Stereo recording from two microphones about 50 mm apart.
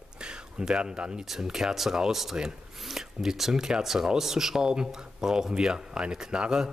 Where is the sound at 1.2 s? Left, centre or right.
Centre.